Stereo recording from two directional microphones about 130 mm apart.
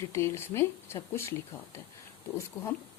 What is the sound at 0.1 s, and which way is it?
A woman's voice, 20° left (ahead or behind).